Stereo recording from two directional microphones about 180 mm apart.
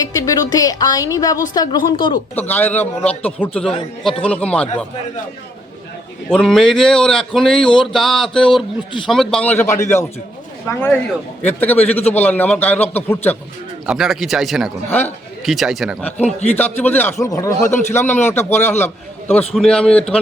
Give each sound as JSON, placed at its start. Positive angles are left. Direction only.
{"t": 0.0, "sound": "a woman's voice", "side_deg": 20}
{"t": 2.3, "sound": "a man's voice", "side_deg": 10}
{"t": 6.3, "sound": "a man's voice", "side_deg": 0}
{"t": 13.8, "sound": "speech", "side_deg": 0}
{"t": 14.8, "sound": "a man's voice", "side_deg": 10}
{"t": 15.4, "sound": "speech", "side_deg": 0}
{"t": 16.1, "sound": "a man's voice", "side_deg": 40}
{"t": 16.6, "sound": "a man's voice", "side_deg": 10}